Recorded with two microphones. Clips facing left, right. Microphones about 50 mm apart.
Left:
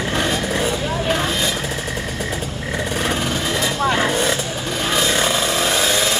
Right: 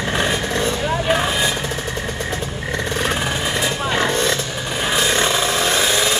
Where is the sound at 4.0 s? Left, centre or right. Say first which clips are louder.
Even; centre.